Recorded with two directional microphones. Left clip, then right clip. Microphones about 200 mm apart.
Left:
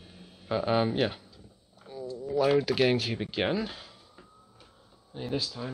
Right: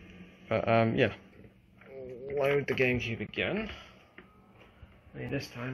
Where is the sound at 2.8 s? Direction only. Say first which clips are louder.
Left 3 dB; 40° left (ahead or behind).